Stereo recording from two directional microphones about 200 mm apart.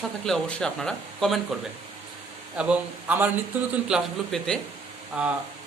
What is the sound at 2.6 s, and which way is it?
A man's voice, 5° right (ahead or behind).